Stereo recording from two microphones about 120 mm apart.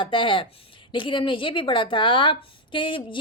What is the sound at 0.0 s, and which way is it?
A woman's voice, 45° left (ahead or behind).